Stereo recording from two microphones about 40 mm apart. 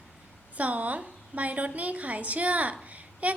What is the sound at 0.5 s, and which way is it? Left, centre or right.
A woman's voice, right.